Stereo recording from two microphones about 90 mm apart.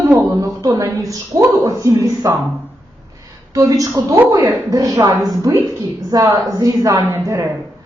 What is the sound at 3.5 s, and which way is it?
A woman's voice, 40° right (ahead or behind).